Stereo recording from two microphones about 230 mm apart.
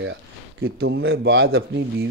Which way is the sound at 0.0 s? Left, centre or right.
Right.